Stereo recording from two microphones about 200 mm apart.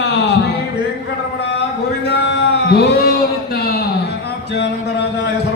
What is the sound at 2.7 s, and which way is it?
Speech, 50° left (ahead or behind).